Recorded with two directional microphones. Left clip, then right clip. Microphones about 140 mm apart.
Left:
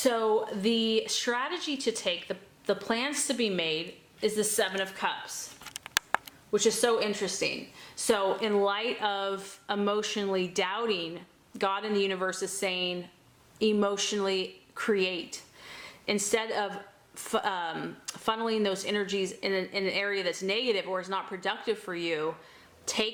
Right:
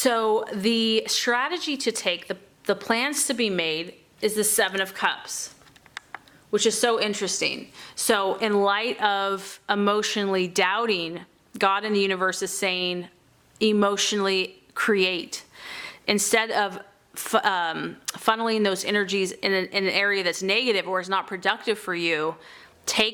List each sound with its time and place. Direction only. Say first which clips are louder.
0.0 s speech: right 4 dB; 35° right (ahead or behind)
6.5 s speech: right 4 dB; 35° right (ahead or behind)